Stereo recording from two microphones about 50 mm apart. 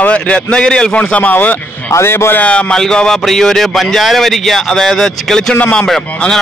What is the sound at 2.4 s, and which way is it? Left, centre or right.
A man's voice, left.